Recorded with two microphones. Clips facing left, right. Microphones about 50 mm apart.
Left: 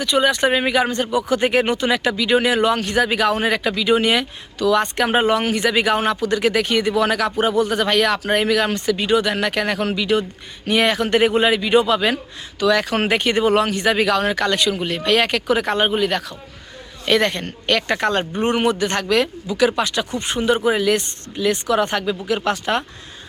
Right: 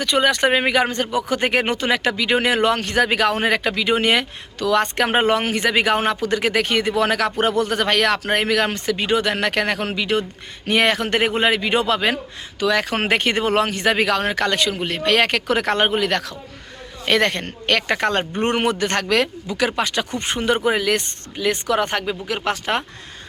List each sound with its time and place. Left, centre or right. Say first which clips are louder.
0.0 s speech: even; right
17.1 s speech: left 1 dB; right